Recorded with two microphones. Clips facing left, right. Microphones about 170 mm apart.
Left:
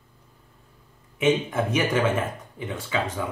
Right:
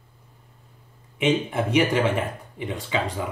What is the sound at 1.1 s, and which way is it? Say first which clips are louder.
Speech: even; 10° right (ahead or behind).